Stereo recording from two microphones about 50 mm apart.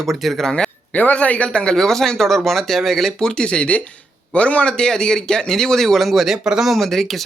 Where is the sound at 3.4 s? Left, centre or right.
Left; by 6.7 s centre.